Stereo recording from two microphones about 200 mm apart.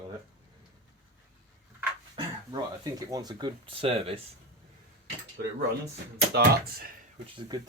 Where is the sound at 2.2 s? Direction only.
20° right (ahead or behind).